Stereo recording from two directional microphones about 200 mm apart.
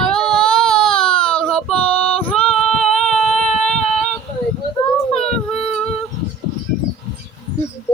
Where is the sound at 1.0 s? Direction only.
25° left (ahead or behind).